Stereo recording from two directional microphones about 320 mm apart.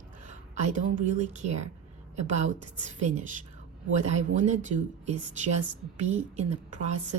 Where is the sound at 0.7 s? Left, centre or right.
Right.